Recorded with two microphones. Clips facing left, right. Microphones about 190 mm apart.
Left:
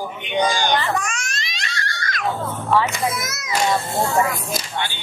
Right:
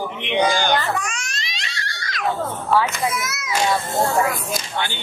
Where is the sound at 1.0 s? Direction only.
50° left (ahead or behind).